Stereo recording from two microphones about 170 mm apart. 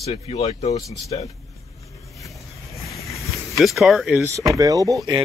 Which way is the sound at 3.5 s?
Centre (ahead or behind).